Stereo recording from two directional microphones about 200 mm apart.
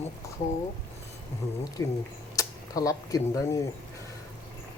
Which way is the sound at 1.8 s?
15° left (ahead or behind).